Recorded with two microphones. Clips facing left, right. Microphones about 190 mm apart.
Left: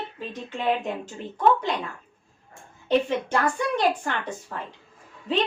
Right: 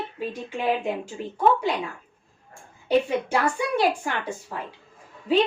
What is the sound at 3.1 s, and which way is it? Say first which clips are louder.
A woman's voice: right 1 dB; 10° right (ahead or behind).